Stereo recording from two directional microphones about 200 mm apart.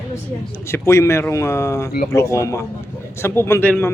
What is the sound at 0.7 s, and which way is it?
A man's voice, 15° left (ahead or behind).